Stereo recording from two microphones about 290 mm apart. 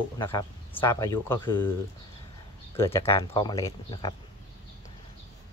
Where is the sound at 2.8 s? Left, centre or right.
Centre.